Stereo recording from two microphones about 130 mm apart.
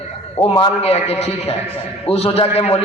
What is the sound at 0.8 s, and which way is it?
A man's voice, 55° left (ahead or behind).